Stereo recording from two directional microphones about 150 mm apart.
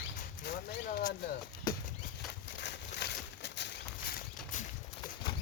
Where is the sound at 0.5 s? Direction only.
65° left (ahead or behind).